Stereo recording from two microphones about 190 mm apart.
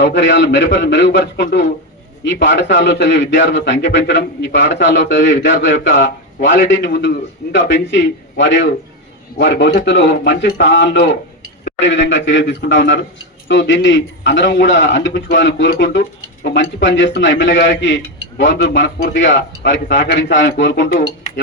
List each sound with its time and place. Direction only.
0.0 s a man's voice: 70° left (ahead or behind)